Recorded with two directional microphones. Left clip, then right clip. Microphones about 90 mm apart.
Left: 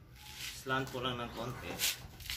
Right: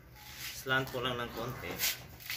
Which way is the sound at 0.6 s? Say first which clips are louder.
Right 4 dB; 10° left (ahead or behind).